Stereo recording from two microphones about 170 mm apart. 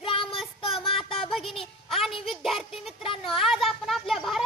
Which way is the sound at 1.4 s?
35° left (ahead or behind).